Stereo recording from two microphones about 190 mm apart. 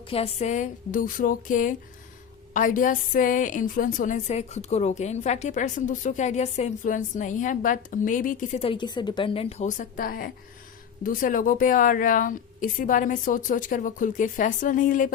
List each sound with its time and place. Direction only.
0.1 s a woman's voice: 30° left (ahead or behind)
8.6 s a woman's voice: 25° left (ahead or behind); by 15.1 s 45° left (ahead or behind)